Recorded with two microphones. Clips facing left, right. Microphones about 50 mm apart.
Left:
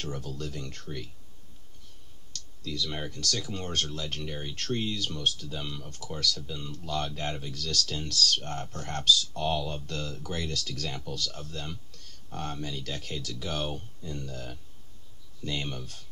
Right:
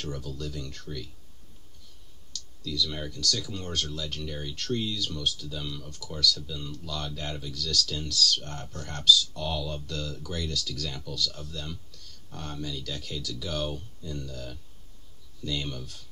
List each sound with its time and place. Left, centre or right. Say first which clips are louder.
0.0 s speech: even; left
2.6 s speech: right 2 dB; left